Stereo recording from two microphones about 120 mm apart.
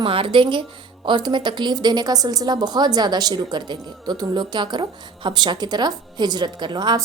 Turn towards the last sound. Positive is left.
turn(degrees=-40)  # may be behind; listen again after turning